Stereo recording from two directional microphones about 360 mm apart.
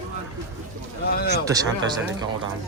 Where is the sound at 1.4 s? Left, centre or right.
Centre.